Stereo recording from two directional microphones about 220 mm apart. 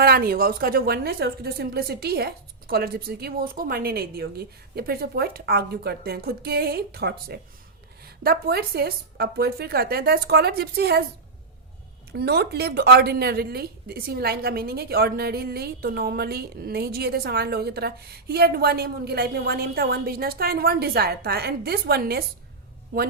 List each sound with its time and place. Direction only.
0.0 s a woman's voice: 45° right (ahead or behind)
12.1 s a woman's voice: 45° right (ahead or behind)